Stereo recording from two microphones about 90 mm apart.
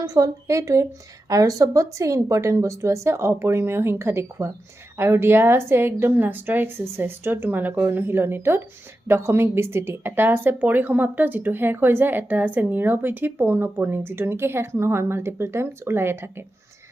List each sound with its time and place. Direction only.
0.0 s speech: 40° right (ahead or behind); by 16.3 s 25° right (ahead or behind)